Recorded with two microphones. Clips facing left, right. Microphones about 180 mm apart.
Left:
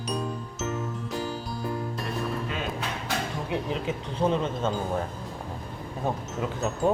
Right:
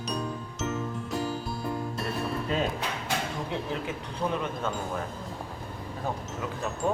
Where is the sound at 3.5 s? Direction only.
20° left (ahead or behind).